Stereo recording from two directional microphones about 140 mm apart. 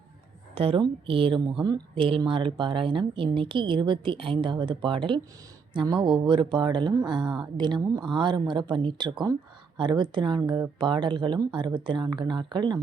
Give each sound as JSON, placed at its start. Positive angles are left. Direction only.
{"t": 0.5, "sound": "speech", "side_deg": -45}